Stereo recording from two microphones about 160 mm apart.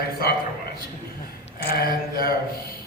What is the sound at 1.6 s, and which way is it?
Speech, 75° left (ahead or behind).